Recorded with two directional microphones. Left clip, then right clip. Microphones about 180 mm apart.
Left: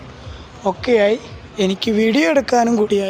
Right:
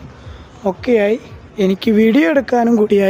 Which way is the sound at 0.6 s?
45° right (ahead or behind).